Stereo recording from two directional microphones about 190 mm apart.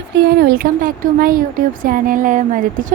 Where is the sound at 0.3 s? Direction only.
50° right (ahead or behind).